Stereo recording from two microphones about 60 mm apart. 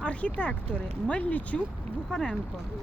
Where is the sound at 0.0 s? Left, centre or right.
Left.